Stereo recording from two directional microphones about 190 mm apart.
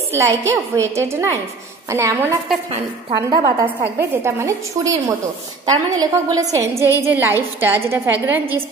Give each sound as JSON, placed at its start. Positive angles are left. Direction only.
{"t": 0.1, "sound": "a woman's voice", "side_deg": -15}